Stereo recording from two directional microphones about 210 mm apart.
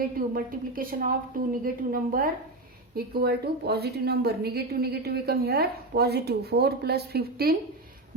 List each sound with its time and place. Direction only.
0.2 s a woman's voice: 40° right (ahead or behind)